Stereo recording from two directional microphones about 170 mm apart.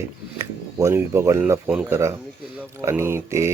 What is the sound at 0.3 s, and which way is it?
Speech, 15° right (ahead or behind).